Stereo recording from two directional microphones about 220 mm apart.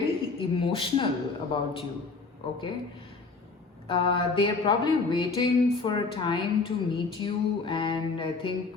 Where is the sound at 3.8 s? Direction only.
25° left (ahead or behind).